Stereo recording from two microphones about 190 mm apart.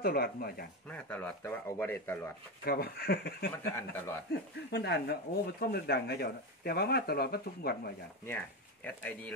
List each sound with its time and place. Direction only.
0.0 s speech: 55° left (ahead or behind)
0.8 s speech: 5° left (ahead or behind)
2.6 s speech: 55° left (ahead or behind)
3.5 s speech: 10° left (ahead or behind)
4.3 s speech: 60° left (ahead or behind)
8.3 s speech: 10° left (ahead or behind)